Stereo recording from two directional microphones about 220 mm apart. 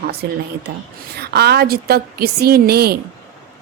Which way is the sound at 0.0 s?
45° right (ahead or behind).